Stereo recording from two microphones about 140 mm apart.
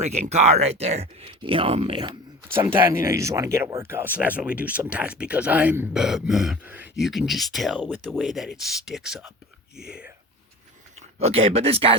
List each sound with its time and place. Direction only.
0.0 s speech: 50° right (ahead or behind)
2.5 s speech: 15° right (ahead or behind)
5.9 s speech: 5° right (ahead or behind)
7.0 s speech: centre (ahead or behind)
7.8 s speech: 10° right (ahead or behind)
11.2 s speech: 45° right (ahead or behind)